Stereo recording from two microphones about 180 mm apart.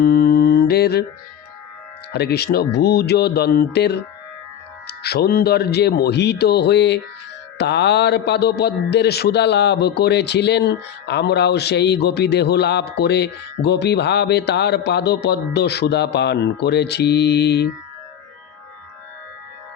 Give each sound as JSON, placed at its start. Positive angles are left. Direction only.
{"t": 0.0, "sound": "mantra", "side_deg": 60}
{"t": 2.1, "sound": "a man's voice", "side_deg": 65}